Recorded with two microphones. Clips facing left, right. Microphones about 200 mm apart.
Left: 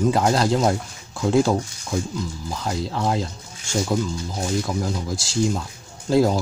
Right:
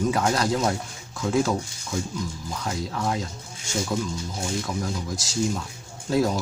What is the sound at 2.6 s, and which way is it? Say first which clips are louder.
Speech: left 4 dB; 30° left (ahead or behind).